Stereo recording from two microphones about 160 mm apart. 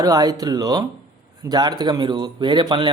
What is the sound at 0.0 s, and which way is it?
Speech, 25° right (ahead or behind).